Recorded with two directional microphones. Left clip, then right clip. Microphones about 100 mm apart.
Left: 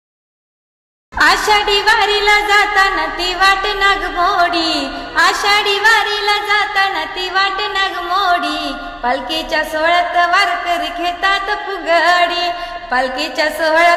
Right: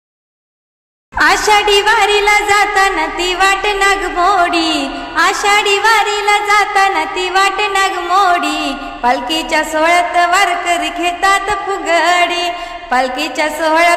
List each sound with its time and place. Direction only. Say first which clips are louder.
1.1 s music: right 1 dB; 70° right (ahead or behind); by 6.3 s 50° right (ahead or behind)
6.5 s music: right 3 dB; 70° right (ahead or behind); by 12.5 s 45° right (ahead or behind)
12.9 s a woman's voice: right 3 dB; 50° right (ahead or behind)